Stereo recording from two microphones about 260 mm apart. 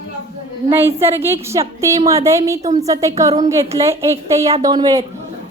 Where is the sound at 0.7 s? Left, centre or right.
Centre.